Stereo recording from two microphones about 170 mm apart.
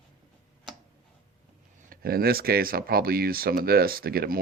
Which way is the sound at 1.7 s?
60° right (ahead or behind).